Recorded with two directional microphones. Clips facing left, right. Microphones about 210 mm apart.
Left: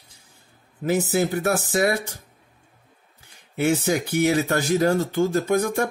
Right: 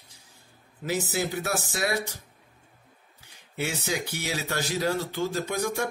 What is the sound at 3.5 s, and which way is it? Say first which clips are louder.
Speech: left 9 dB; 50° left (ahead or behind).